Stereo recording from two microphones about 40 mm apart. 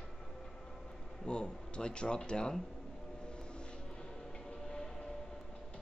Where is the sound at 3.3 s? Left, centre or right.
Left.